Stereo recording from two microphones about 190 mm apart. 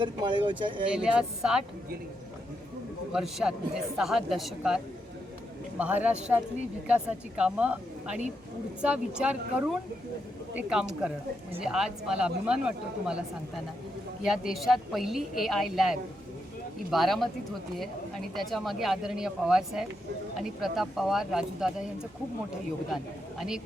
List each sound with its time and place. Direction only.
0.0 s speech: 25° right (ahead or behind)
0.9 s speech: 5° right (ahead or behind)
3.1 s speech: 5° right (ahead or behind)
5.8 s speech: 5° right (ahead or behind)
14.3 s speech: centre (ahead or behind)